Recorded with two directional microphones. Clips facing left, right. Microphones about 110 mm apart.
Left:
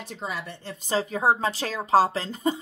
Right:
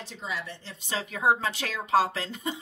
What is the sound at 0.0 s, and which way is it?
Speech, 50° left (ahead or behind).